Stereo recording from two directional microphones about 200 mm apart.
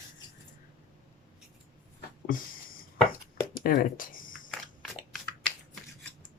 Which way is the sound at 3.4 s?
45° left (ahead or behind).